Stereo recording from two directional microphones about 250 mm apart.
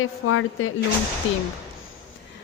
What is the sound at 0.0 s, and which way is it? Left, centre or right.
Speech, left.